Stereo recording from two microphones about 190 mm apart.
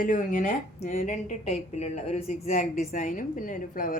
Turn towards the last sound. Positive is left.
turn(degrees=45)  # may be behind; listen again after turning